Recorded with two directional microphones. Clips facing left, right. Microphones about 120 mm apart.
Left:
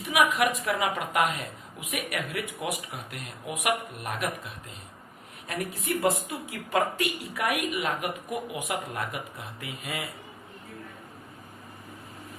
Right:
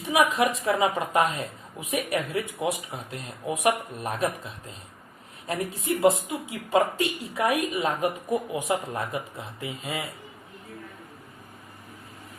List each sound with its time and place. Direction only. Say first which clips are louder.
0.0 s a woman's voice: right 2 dB; 25° right (ahead or behind)